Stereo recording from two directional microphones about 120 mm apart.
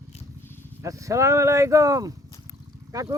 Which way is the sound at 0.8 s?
25° right (ahead or behind).